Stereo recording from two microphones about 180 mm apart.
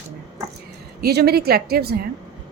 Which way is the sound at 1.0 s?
60° right (ahead or behind).